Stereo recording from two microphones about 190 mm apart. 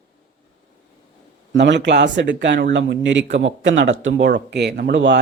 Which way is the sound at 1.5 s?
65° right (ahead or behind).